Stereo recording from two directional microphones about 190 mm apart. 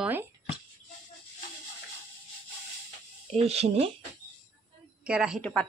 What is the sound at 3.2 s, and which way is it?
Speech, 35° right (ahead or behind).